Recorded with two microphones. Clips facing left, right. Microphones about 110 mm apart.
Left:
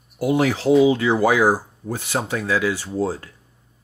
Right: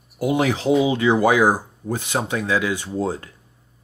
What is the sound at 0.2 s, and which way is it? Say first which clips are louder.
A man's voice: left 1 dB; 15° right (ahead or behind).